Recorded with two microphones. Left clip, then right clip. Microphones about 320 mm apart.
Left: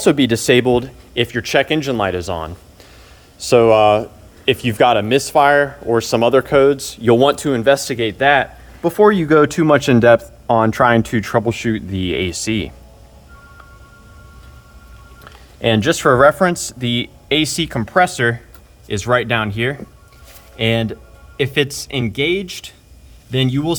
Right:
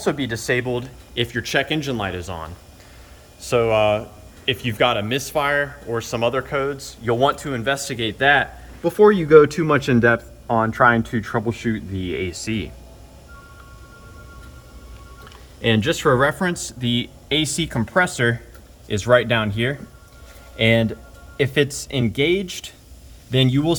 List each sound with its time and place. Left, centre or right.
0.0 s speech: left
15.6 s speech: centre